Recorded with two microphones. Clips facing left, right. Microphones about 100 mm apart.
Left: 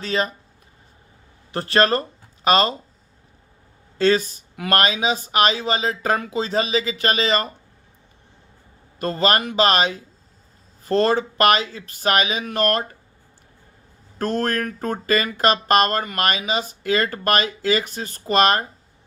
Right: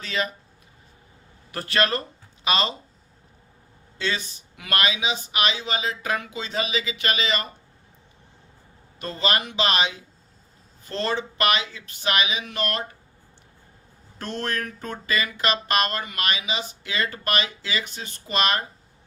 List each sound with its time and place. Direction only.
0.0 s speech: 35° left (ahead or behind)
1.5 s speech: 35° left (ahead or behind)
3.9 s speech: 45° left (ahead or behind)
9.0 s speech: 45° left (ahead or behind)
14.2 s speech: 45° left (ahead or behind)